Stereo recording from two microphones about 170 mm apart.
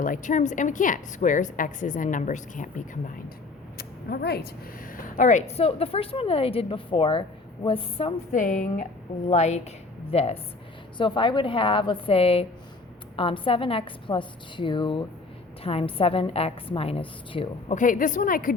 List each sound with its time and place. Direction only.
0.0 s a woman's voice: 50° left (ahead or behind)
3.8 s speech: 70° left (ahead or behind); by 8.1 s 30° left (ahead or behind)
8.3 s a woman's voice: 50° left (ahead or behind); by 17.5 s 30° left (ahead or behind)
17.7 s a woman's voice: 50° left (ahead or behind)